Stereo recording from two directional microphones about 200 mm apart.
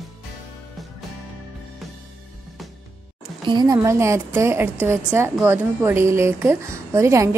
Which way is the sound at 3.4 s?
20° right (ahead or behind).